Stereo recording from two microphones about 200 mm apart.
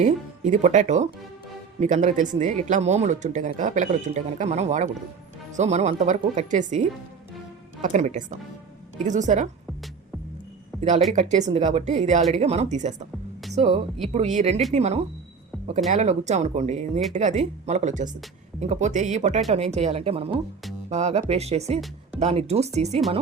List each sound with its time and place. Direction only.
0.0 s speech: 40° right (ahead or behind)
10.8 s speech: 35° right (ahead or behind)
15.5 s a sound: centre (ahead or behind)
15.9 s speech: 35° right (ahead or behind)